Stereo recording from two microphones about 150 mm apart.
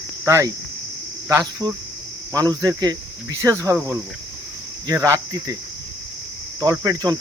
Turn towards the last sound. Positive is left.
turn(degrees=-25)  # may be behind; listen again after turning